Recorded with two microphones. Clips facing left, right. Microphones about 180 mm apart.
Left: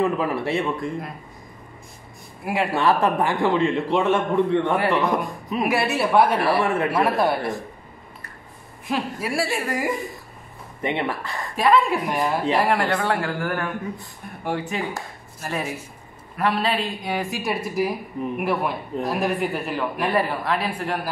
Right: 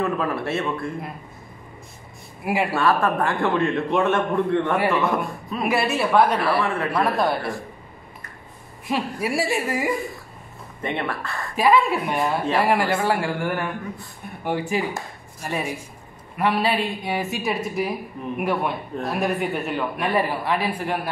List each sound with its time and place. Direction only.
0.0 s a man's voice: 15° left (ahead or behind)
2.4 s a man's voice: 5° right (ahead or behind)
2.7 s a man's voice: 20° left (ahead or behind)
5.6 s a man's voice: centre (ahead or behind)
6.6 s speech: 25° left (ahead or behind)
6.9 s a man's voice: 5° left (ahead or behind)
8.8 s a man's voice: 5° right (ahead or behind)
10.8 s a man's voice: 15° left (ahead or behind)
11.5 s a man's voice: 5° right (ahead or behind)